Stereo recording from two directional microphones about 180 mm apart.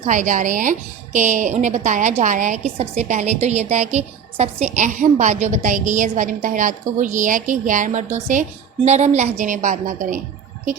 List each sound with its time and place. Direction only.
0.0 s a woman's voice: 45° right (ahead or behind)